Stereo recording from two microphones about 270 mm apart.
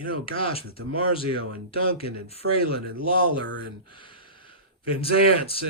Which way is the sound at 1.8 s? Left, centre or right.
Left.